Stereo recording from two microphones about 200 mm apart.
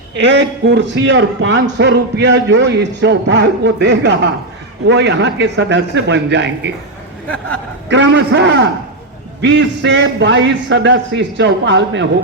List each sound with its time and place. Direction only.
0.2 s a man's voice: 60° right (ahead or behind)
7.9 s a man's voice: 60° right (ahead or behind)